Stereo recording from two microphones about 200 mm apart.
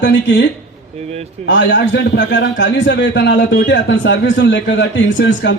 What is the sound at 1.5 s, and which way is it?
A man's voice, 65° left (ahead or behind).